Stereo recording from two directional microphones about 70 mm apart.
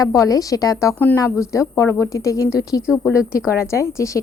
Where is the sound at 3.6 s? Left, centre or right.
Left.